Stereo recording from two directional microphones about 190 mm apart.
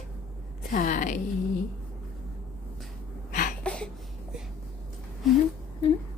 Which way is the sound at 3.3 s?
45° left (ahead or behind).